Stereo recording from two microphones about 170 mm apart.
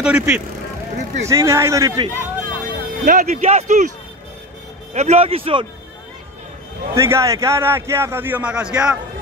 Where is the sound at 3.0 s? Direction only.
55° right (ahead or behind).